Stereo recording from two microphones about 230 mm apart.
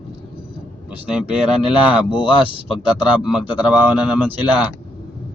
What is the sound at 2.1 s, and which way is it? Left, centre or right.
Speech, left.